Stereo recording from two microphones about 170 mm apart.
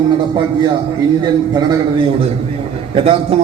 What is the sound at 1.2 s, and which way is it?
A man's voice, 25° right (ahead or behind).